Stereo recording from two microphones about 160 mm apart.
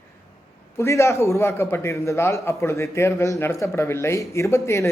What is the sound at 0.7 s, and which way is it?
A man's voice, 15° left (ahead or behind).